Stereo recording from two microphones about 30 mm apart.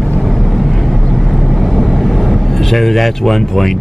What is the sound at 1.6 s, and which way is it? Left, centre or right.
Vehicle, centre.